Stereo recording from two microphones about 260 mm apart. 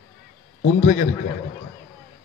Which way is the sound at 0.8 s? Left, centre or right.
Left.